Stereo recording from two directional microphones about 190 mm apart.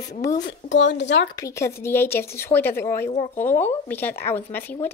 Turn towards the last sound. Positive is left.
turn(degrees=10)  # may be behind; listen again after turning